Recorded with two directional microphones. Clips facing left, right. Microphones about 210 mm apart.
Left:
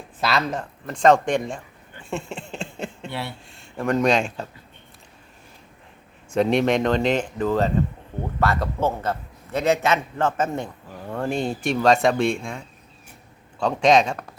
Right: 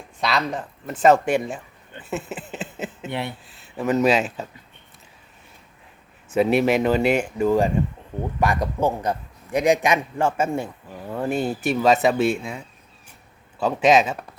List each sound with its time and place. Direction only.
0.2 s speech: centre (ahead or behind)
2.0 s a sound: 5° right (ahead or behind)
3.1 s a man's voice: 20° right (ahead or behind)
3.5 s speech: 5° right (ahead or behind)
6.3 s a man's voice: 5° right (ahead or behind)